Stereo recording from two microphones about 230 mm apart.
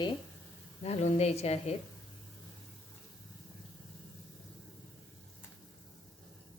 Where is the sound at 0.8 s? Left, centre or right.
Left.